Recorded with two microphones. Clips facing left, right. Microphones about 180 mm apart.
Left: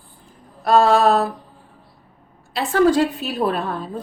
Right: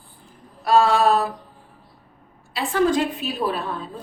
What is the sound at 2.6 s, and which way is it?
Speech, 40° left (ahead or behind).